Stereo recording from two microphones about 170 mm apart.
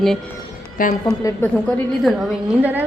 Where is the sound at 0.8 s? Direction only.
55° left (ahead or behind).